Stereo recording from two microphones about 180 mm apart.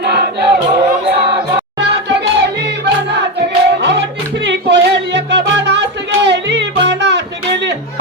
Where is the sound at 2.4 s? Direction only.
70° right (ahead or behind).